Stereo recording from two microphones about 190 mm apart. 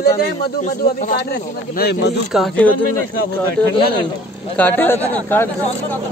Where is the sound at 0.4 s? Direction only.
55° left (ahead or behind).